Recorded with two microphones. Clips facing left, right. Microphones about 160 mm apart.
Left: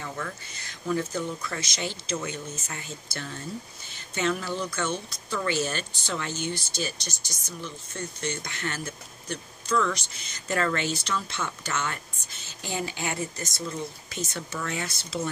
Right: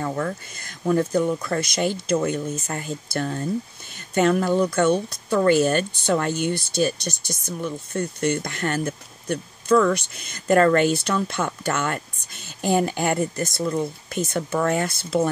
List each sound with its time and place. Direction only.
0.0 s speech: 45° right (ahead or behind)